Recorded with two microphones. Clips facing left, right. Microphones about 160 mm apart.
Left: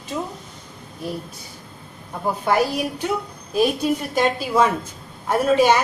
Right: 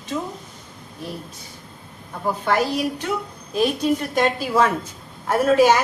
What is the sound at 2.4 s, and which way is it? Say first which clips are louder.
A woman's voice: left 1 dB; 10° left (ahead or behind).